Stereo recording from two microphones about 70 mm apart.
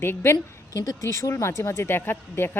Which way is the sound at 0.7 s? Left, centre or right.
Left.